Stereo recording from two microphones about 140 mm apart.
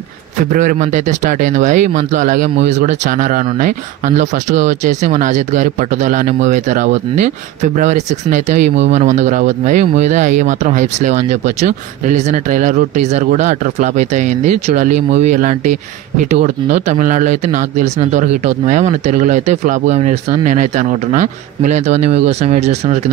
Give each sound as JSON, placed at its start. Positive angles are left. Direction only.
{"t": 0.5, "sound": "speech", "side_deg": -70}